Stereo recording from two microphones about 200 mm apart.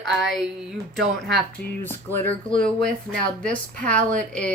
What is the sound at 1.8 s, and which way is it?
Speech, 10° left (ahead or behind).